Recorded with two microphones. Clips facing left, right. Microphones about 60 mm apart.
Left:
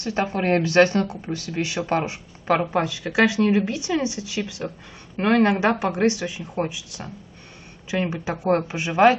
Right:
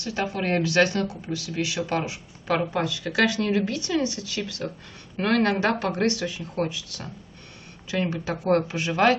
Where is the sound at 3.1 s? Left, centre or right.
Centre.